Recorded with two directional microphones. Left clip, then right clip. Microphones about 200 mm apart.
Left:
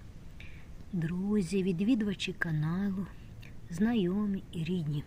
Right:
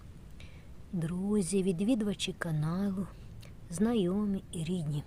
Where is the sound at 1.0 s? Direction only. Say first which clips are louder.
Right 1 dB; 25° right (ahead or behind).